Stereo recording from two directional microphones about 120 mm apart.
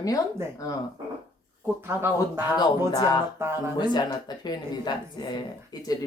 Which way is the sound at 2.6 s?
35° left (ahead or behind).